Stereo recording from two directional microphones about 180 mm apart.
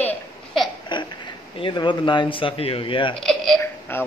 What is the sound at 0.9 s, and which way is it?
Speech, 25° left (ahead or behind).